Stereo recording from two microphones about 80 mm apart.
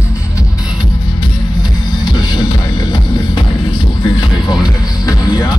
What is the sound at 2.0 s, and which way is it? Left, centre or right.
Music, left.